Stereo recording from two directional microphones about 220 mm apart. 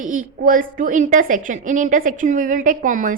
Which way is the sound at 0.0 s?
35° right (ahead or behind).